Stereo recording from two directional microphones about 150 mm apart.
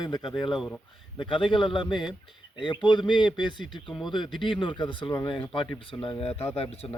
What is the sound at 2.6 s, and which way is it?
Speech, 30° left (ahead or behind).